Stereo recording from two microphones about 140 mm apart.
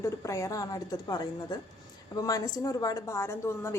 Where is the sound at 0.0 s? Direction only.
20° left (ahead or behind).